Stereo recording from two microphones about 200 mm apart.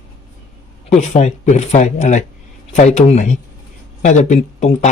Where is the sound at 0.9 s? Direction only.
35° left (ahead or behind).